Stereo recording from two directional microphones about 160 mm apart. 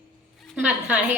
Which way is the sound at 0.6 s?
10° right (ahead or behind).